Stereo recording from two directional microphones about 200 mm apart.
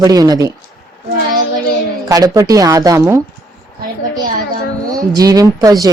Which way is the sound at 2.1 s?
20° right (ahead or behind).